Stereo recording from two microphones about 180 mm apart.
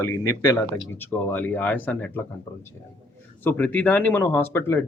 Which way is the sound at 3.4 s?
10° left (ahead or behind).